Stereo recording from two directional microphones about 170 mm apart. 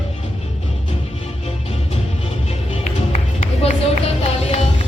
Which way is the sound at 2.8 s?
40° left (ahead or behind).